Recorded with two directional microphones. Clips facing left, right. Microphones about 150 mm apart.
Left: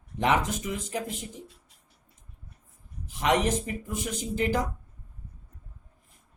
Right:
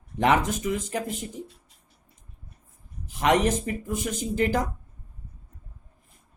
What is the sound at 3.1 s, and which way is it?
Speech, 50° right (ahead or behind).